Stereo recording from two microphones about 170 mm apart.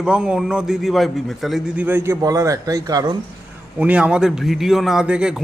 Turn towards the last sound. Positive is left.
turn(degrees=-5)  # may be behind; listen again after turning